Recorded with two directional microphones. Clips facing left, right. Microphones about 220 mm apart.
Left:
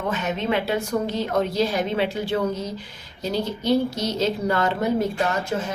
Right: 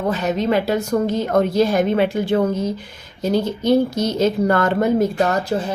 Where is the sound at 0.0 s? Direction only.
35° right (ahead or behind); by 5.0 s 50° right (ahead or behind).